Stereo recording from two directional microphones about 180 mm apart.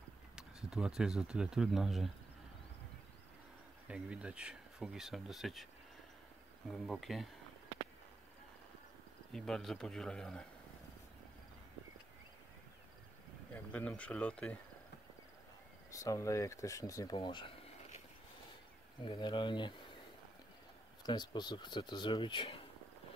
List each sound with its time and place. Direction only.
0.4 s speech: 5° right (ahead or behind)
3.8 s speech: 5° right (ahead or behind)
6.7 s speech: centre (ahead or behind)
9.3 s speech: centre (ahead or behind)
13.5 s speech: 10° left (ahead or behind)
15.9 s speech: 20° left (ahead or behind)
21.0 s speech: 25° left (ahead or behind)